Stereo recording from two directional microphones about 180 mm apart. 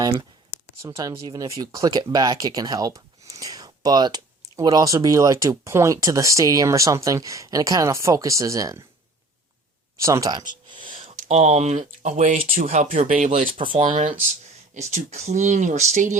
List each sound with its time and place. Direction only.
0.0 s speech: 20° right (ahead or behind)
10.0 s a sound: 20° right (ahead or behind)
11.2 s speech: 40° right (ahead or behind)